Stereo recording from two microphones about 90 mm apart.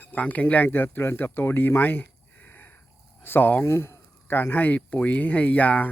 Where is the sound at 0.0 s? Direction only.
20° left (ahead or behind).